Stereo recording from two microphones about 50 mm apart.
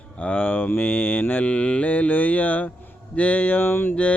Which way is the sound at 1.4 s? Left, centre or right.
Left.